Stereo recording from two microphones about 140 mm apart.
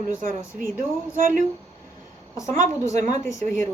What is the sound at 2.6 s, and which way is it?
Speech, 25° left (ahead or behind).